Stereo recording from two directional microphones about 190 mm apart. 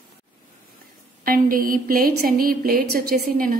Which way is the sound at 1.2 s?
50° right (ahead or behind).